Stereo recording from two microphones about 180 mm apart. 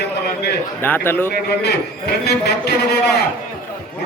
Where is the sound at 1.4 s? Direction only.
65° left (ahead or behind).